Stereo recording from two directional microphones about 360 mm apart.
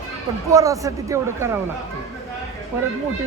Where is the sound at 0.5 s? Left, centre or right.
Centre.